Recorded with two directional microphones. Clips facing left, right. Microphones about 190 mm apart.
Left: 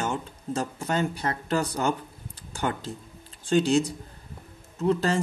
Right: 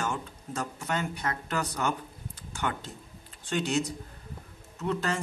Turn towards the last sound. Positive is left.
turn(degrees=30)  # may be behind; listen again after turning